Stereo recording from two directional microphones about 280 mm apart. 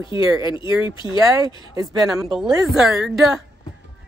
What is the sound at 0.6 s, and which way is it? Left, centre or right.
Speech, centre.